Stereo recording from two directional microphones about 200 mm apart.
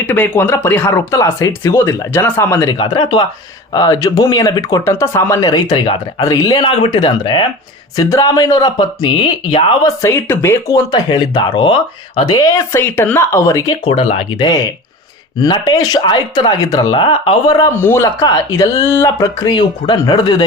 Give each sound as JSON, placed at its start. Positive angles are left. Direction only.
{"t": 0.1, "sound": "speech", "side_deg": 10}
{"t": 10.0, "sound": "speech", "side_deg": 10}